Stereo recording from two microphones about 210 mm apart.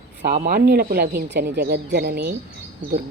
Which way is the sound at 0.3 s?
40° right (ahead or behind).